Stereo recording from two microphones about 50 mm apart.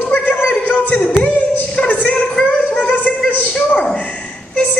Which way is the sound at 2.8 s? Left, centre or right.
Left.